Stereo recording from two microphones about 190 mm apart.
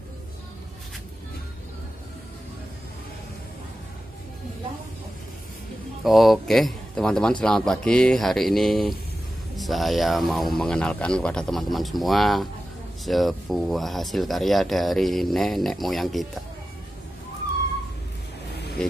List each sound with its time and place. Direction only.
6.0 s speech: centre (ahead or behind)
18.8 s speech: 5° left (ahead or behind)